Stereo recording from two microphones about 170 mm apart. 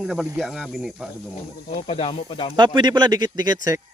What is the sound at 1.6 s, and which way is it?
Speech, 35° left (ahead or behind).